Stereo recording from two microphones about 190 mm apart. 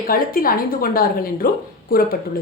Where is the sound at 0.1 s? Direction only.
50° left (ahead or behind).